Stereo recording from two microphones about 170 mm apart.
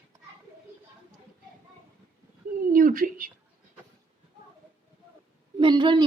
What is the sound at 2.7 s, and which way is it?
Speech, 55° right (ahead or behind).